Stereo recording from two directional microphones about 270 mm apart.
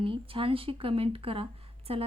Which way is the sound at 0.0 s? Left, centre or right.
Centre.